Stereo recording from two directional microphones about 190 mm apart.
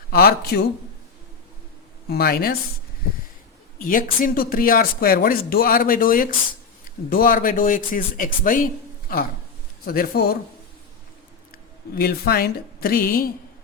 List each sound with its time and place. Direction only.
0.1 s speech: 55° left (ahead or behind)
2.0 s speech: 55° left (ahead or behind)
3.8 s speech: 45° left (ahead or behind)
11.5 s speech: 55° left (ahead or behind)